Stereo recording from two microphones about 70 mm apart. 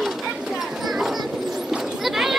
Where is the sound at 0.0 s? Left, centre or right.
Centre.